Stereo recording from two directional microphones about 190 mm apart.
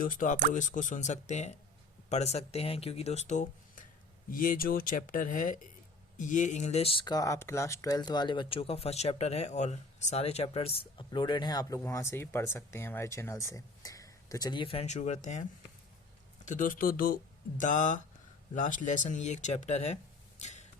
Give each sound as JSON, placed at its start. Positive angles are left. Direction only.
{"t": 0.0, "sound": "speech", "side_deg": 45}
{"t": 16.5, "sound": "speech", "side_deg": 45}
{"t": 20.4, "sound": "a sound", "side_deg": 35}